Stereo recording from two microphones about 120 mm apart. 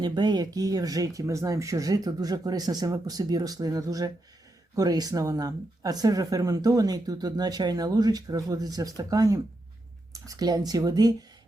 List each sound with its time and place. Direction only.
0.0 s a woman's voice: 35° right (ahead or behind)